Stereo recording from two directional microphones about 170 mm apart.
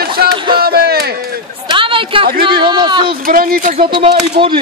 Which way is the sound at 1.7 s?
30° right (ahead or behind).